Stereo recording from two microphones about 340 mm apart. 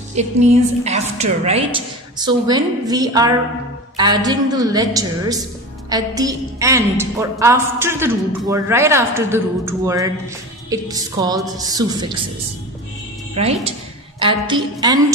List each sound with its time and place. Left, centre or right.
0.1 s a woman's voice: centre
13.3 s a woman's voice: centre